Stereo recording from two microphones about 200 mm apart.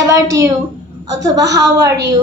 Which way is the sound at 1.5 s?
15° right (ahead or behind).